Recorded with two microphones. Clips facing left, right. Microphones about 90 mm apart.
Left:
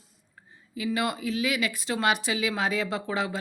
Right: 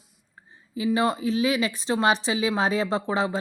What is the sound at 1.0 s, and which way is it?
Speech, 25° right (ahead or behind).